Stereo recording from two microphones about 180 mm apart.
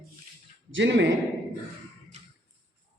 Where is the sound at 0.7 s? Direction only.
80° right.